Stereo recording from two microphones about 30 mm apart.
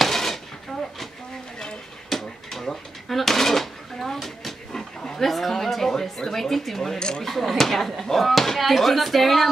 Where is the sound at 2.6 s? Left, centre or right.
Centre.